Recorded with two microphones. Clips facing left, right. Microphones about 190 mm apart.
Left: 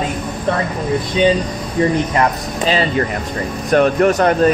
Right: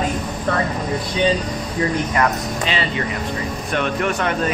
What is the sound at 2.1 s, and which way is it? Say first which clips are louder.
Speech: left 3 dB; 40° left (ahead or behind).